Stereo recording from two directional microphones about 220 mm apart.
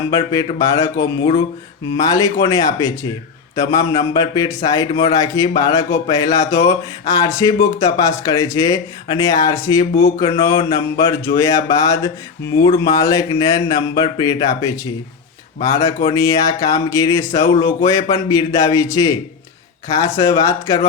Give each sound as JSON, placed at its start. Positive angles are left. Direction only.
{"t": 0.1, "sound": "speech", "side_deg": 15}
{"t": 9.9, "sound": "a sound", "side_deg": 25}
{"t": 10.6, "sound": "speech", "side_deg": 15}
{"t": 16.0, "sound": "speech", "side_deg": 15}